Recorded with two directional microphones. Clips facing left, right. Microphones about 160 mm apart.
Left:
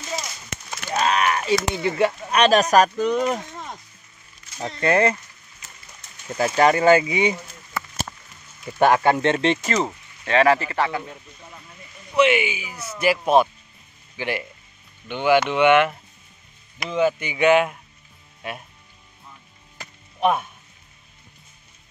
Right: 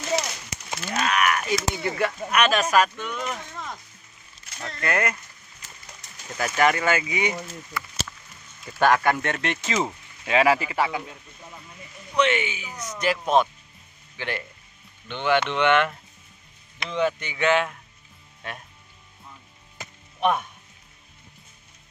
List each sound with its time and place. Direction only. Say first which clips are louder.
0.9 s speech: left 3 dB; 30° left (ahead or behind)
4.6 s speech: left 7 dB; 25° left (ahead or behind)
6.3 s speech: left 4 dB; 30° left (ahead or behind)
7.7 s a sound: left 5 dB; 50° left (ahead or behind)
8.7 s speech: left 3 dB; 20° left (ahead or behind)
9.7 s speech: left 3 dB; centre (ahead or behind)
10.2 s speech: left 3 dB; 10° right (ahead or behind)
12.2 s speech: left 4 dB; 10° left (ahead or behind)
20.2 s music: left 2 dB; 5° left (ahead or behind)